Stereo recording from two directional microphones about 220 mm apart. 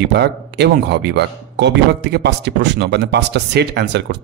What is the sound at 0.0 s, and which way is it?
Speech, 50° right (ahead or behind).